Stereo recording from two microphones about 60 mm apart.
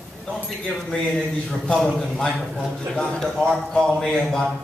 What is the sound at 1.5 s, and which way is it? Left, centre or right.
Speech, centre.